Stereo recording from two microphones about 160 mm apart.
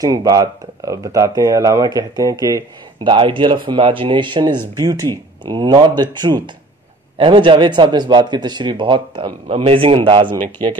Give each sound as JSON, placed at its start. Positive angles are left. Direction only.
{"t": 0.0, "sound": "speech", "side_deg": -20}